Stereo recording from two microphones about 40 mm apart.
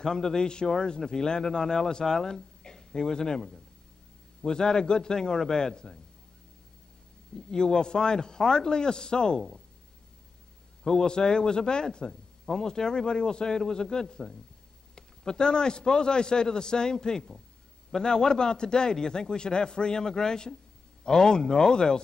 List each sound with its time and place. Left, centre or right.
0.0 s speech: centre
7.3 s a man's voice: centre
10.8 s a man's voice: centre